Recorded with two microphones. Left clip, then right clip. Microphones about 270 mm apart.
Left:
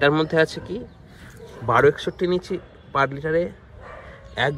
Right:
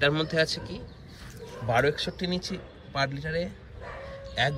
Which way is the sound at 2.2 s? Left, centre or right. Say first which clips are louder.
Left 9 dB; centre.